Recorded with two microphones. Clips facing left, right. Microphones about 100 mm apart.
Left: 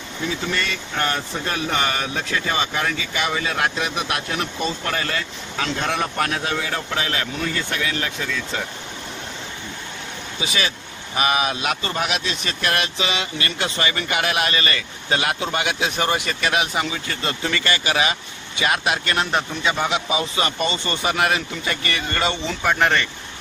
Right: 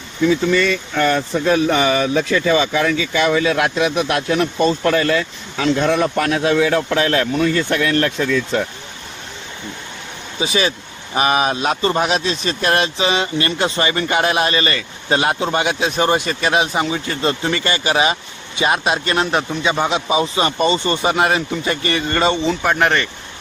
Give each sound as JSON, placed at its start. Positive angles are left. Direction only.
{"t": 0.3, "sound": "speech", "side_deg": -90}
{"t": 10.4, "sound": "a man's voice", "side_deg": -25}
{"t": 22.3, "sound": "speech", "side_deg": -15}
{"t": 22.7, "sound": "speech", "side_deg": -5}